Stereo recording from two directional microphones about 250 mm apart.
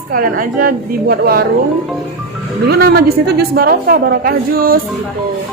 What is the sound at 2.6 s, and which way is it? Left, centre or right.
A woman's voice, right.